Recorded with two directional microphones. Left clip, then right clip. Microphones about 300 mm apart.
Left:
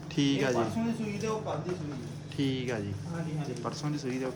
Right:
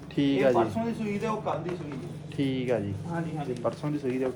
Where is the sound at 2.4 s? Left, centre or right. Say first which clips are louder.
Right 5 dB; centre.